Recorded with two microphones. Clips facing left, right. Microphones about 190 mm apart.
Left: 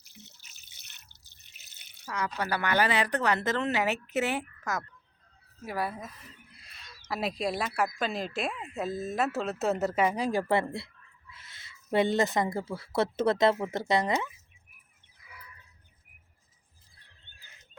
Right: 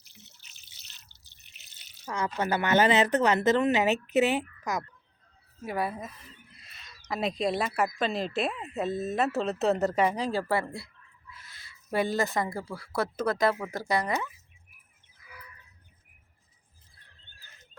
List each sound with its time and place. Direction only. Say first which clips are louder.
0.3 s drip: even; 45° left (ahead or behind)
2.0 s a woman's voice: right 3 dB; 25° right (ahead or behind)
5.6 s speech: right 2 dB; centre (ahead or behind)
6.5 s bird: left 1 dB; centre (ahead or behind)
7.8 s speech: right 2 dB; centre (ahead or behind); by 14.3 s 20° left (ahead or behind)